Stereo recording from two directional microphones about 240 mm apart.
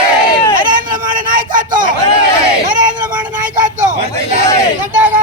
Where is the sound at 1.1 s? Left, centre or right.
Right.